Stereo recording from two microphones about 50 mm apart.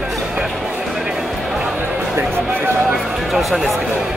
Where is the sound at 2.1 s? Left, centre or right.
Right.